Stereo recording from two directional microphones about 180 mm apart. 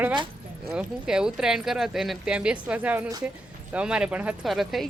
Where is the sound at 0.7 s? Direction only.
5° right (ahead or behind).